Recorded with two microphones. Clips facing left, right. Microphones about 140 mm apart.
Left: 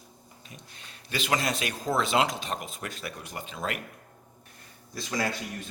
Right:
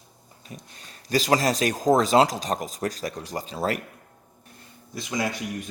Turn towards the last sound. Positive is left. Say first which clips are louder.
# right 3 dB
turn(degrees=-20)  # may be behind; listen again after turning